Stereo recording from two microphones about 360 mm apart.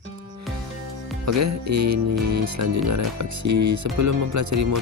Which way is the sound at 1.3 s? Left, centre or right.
Right.